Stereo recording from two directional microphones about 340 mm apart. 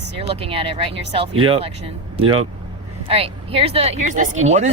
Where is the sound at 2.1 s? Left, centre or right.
Right.